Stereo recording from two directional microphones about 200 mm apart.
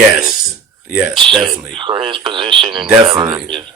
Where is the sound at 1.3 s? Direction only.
20° right (ahead or behind).